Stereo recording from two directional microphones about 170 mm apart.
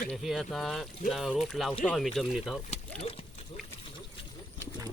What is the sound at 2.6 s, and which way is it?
Speech, 40° left (ahead or behind).